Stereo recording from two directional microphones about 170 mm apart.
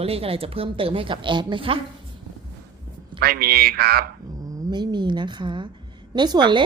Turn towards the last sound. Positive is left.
turn(degrees=-25)  # may be behind; listen again after turning